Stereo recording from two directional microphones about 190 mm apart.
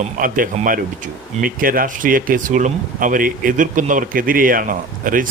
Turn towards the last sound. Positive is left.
turn(degrees=-45)  # may be behind; listen again after turning